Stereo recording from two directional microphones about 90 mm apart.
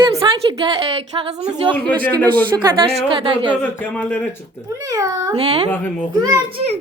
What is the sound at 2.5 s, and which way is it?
Speech, 30° right (ahead or behind).